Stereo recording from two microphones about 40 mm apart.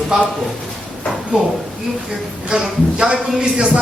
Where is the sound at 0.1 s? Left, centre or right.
Centre.